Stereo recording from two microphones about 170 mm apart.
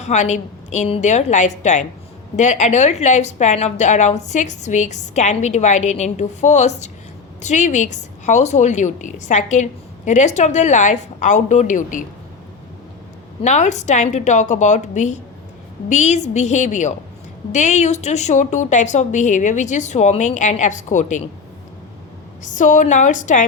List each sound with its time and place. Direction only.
0.0 s a woman's voice: 45° left (ahead or behind)
13.4 s a woman's voice: 45° left (ahead or behind)
22.4 s a woman's voice: 50° left (ahead or behind)